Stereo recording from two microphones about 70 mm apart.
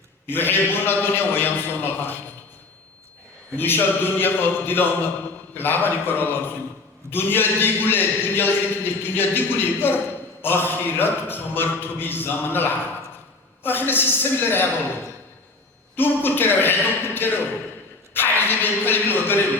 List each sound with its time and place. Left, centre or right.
0.3 s a man's voice: left
3.6 s a man's voice: left
16.0 s speech: left